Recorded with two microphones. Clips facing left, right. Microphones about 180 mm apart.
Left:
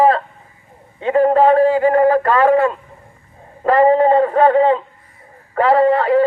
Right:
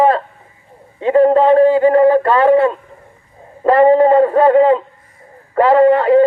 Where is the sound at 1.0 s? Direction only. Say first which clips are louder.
Right 2 dB; 35° right (ahead or behind).